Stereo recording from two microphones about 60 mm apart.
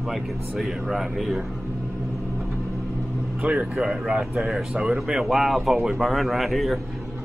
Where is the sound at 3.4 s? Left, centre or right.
Right.